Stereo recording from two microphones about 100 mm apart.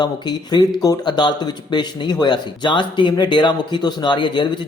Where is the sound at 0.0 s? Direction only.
45° left (ahead or behind).